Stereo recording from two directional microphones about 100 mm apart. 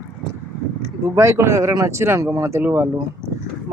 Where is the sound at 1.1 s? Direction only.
25° right (ahead or behind).